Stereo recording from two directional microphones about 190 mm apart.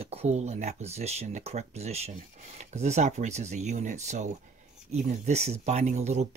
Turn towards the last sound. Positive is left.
turn(degrees=-35)  # may be behind; listen again after turning